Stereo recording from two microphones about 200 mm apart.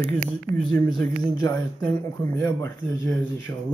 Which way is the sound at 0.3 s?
5° left (ahead or behind).